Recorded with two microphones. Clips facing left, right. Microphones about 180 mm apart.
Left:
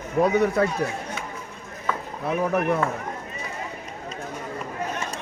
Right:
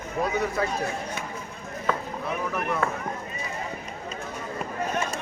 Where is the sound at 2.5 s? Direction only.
40° left (ahead or behind).